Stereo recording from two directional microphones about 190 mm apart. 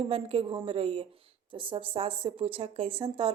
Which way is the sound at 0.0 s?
30° right (ahead or behind).